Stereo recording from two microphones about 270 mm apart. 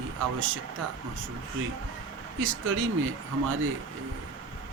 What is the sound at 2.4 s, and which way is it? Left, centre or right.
Speech, right.